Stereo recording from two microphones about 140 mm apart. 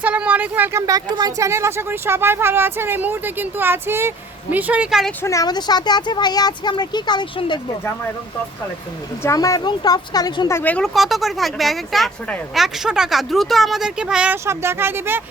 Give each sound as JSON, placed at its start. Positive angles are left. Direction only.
{"t": 0.0, "sound": "speech", "side_deg": -10}
{"t": 5.2, "sound": "speech", "side_deg": 25}
{"t": 9.2, "sound": "speech", "side_deg": 25}
{"t": 10.5, "sound": "speech", "side_deg": 10}
{"t": 14.4, "sound": "speech", "side_deg": -20}